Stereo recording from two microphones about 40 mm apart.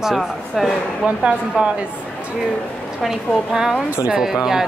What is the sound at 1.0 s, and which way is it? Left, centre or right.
Speech, right.